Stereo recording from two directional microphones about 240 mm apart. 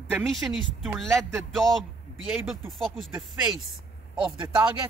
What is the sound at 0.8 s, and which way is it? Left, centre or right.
A man's voice, centre.